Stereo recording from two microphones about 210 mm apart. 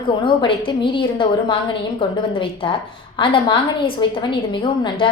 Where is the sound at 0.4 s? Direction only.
25° left (ahead or behind).